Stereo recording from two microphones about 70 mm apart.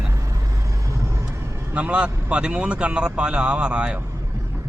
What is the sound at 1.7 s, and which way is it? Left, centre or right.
A man's voice, centre.